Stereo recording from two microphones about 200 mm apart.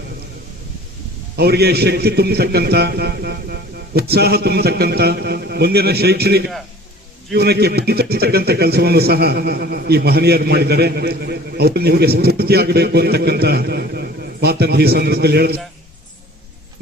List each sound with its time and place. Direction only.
1.4 s a man's voice: 55° right (ahead or behind)